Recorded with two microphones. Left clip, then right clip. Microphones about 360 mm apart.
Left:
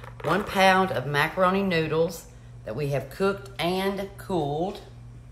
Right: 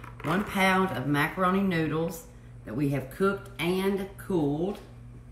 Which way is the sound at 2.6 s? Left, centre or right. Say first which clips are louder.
Left 2 dB; left.